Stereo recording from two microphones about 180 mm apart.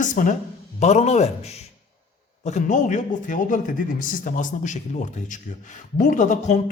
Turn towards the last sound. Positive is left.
turn(degrees=40)  # may be behind; listen again after turning